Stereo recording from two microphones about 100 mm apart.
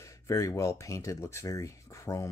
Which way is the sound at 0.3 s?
35° left (ahead or behind).